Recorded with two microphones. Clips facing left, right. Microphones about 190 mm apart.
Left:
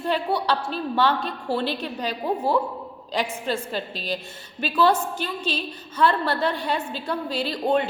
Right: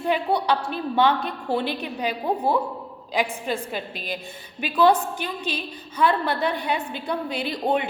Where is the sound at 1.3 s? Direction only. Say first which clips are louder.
Even; 15° right (ahead or behind).